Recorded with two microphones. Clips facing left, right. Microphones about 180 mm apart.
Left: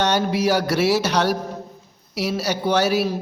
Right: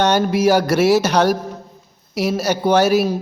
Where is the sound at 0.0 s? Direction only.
50° right (ahead or behind).